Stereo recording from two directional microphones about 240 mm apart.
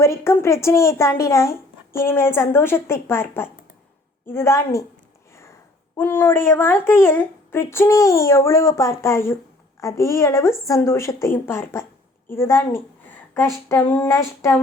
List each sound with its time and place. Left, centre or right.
0.0 s speech: centre
6.0 s speech: centre